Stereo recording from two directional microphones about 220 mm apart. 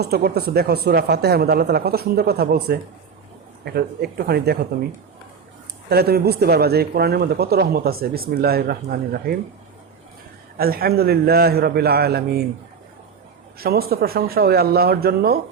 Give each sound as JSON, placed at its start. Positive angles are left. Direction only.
{"t": 0.0, "sound": "speech", "side_deg": -45}
{"t": 5.9, "sound": "speech", "side_deg": -45}
{"t": 10.6, "sound": "speech", "side_deg": -45}
{"t": 13.6, "sound": "speech", "side_deg": -45}